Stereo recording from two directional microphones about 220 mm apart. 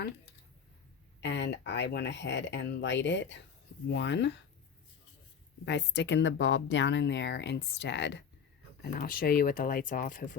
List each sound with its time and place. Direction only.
1.2 s speech: 55° left (ahead or behind)
5.6 s speech: 50° left (ahead or behind)
8.8 s speech: 40° left (ahead or behind)